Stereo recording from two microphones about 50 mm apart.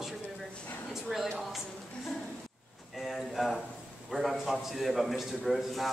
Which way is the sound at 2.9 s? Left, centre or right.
Centre.